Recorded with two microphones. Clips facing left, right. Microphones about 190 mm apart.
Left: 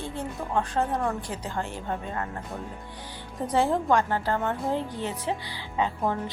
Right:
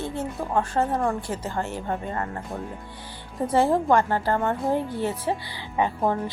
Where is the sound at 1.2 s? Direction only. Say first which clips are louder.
Right 4 dB; 15° left (ahead or behind).